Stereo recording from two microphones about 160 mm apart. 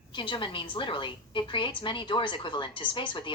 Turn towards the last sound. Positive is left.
turn(degrees=30)  # may be behind; listen again after turning